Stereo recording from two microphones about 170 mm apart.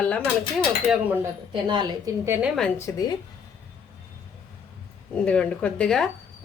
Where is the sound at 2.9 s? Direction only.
15° left (ahead or behind).